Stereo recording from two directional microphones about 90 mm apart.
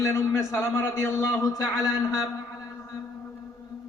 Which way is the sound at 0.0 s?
35° left (ahead or behind).